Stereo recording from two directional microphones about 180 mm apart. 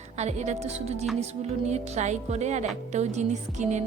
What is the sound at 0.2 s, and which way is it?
A woman's voice, 40° right (ahead or behind).